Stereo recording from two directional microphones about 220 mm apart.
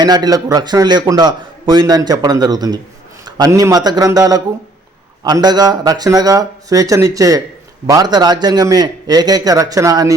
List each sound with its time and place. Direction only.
0.0 s a man's voice: 20° right (ahead or behind)